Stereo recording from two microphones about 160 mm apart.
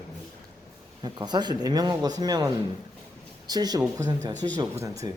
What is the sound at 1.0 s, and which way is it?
Speech, 25° right (ahead or behind).